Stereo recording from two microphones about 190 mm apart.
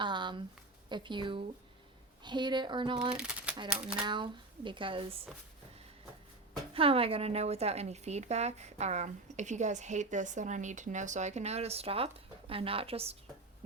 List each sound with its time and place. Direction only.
0.0 s a sound: 25° right (ahead or behind)
0.9 s speech: 25° right (ahead or behind)
3.2 s a sound: 5° right (ahead or behind)
3.7 s speech: 5° right (ahead or behind)
4.0 s speech: 25° right (ahead or behind)
6.7 s a woman's voice: 30° right (ahead or behind)